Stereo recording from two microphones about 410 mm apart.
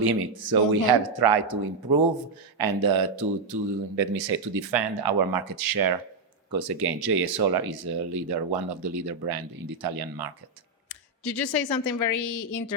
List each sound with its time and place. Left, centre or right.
0.0 s speech: right
6.5 s speech: right
10.8 s speech: left